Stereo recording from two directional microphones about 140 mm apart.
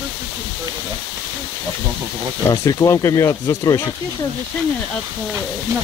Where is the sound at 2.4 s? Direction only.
25° left (ahead or behind).